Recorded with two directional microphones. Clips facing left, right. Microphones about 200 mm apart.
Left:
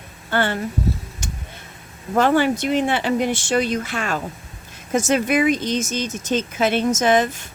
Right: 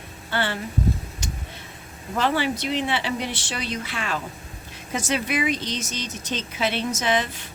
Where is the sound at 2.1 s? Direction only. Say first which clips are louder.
Left 6 dB; 50° left (ahead or behind).